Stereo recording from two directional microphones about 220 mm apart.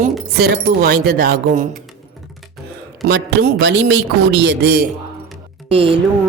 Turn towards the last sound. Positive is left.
turn(degrees=-25)  # may be behind; listen again after turning